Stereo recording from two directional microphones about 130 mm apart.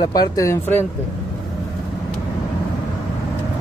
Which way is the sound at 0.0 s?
30° left (ahead or behind).